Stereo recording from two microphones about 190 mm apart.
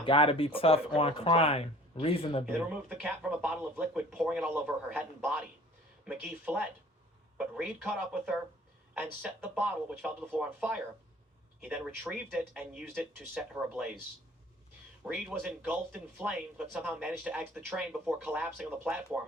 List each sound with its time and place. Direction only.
0.0 s speech: 30° left (ahead or behind)
2.5 s speech: centre (ahead or behind)
15.0 s speech: 5° right (ahead or behind)